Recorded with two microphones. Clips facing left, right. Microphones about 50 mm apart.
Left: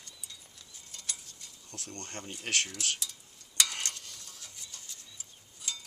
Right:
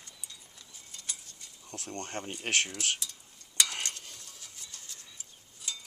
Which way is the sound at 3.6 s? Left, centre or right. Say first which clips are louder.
Even; centre.